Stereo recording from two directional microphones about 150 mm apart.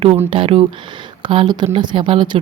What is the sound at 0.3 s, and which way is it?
A woman's voice, 40° right (ahead or behind).